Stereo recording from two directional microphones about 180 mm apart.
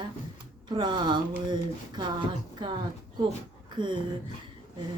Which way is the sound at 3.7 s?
25° right (ahead or behind).